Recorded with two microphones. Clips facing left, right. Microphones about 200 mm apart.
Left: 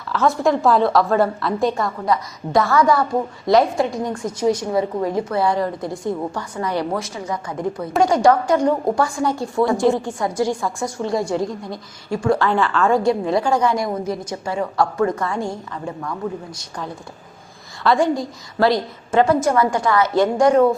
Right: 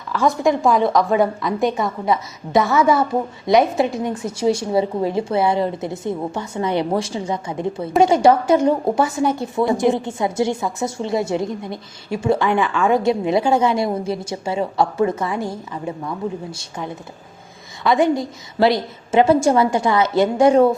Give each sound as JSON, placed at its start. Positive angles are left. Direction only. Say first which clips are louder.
{"t": 0.1, "sound": "a woman's voice", "louder": "even", "side_deg": -15}
{"t": 1.8, "sound": "a woman's voice", "louder": "right 1 dB", "side_deg": 0}
{"t": 2.9, "sound": "a woman's voice", "louder": "right 1 dB", "side_deg": -20}
{"t": 4.1, "sound": "a woman's voice", "louder": "even", "side_deg": -5}
{"t": 4.7, "sound": "a woman's voice", "louder": "right 1 dB", "side_deg": -25}
{"t": 15.4, "sound": "a woman's voice", "louder": "even", "side_deg": -5}
{"t": 15.9, "sound": "a woman's voice", "louder": "right 1 dB", "side_deg": -20}